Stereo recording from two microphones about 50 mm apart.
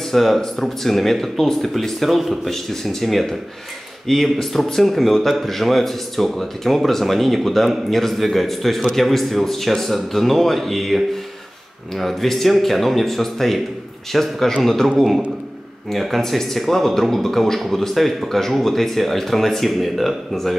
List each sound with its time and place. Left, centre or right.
0.1 s speech: centre